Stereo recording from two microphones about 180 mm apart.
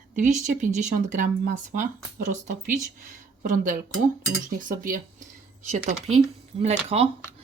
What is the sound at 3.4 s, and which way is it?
Speech, 45° right (ahead or behind).